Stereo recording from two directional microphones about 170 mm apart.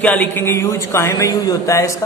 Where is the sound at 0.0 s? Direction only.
10° left (ahead or behind).